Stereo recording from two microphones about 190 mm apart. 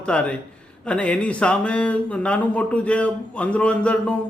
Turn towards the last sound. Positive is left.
turn(degrees=5)  # may be behind; listen again after turning